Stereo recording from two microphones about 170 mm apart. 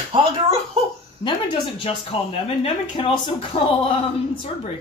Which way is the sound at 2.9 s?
30° left (ahead or behind).